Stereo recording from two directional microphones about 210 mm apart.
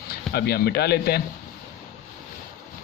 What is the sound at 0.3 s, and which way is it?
Speech, 50° left (ahead or behind).